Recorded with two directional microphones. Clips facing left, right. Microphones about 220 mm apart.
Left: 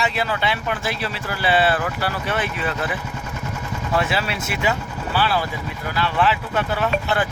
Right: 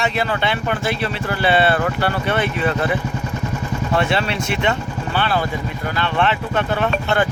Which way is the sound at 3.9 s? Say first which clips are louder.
Right 3 dB; centre (ahead or behind).